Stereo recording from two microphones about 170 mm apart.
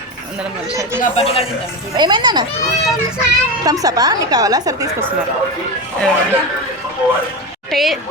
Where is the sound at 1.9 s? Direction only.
25° right (ahead or behind).